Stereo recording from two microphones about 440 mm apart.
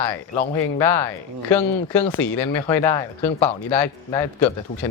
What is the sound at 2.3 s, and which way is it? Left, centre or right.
Speech, left.